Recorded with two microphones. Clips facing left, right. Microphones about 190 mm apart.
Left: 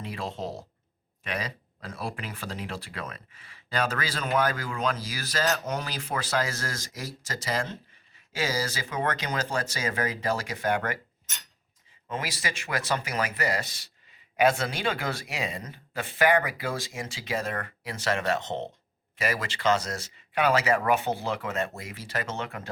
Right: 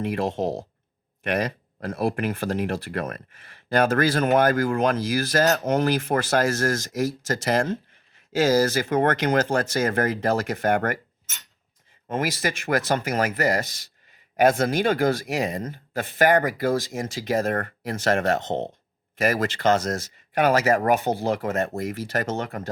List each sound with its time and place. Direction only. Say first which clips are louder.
1.2 s speech: right 9 dB; 50° right (ahead or behind)
12.0 s speech: right 8 dB; 45° right (ahead or behind)